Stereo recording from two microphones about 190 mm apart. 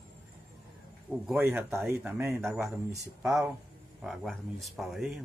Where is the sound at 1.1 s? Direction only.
5° right (ahead or behind).